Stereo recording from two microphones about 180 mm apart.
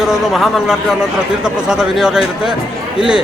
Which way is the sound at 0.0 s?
Centre (ahead or behind).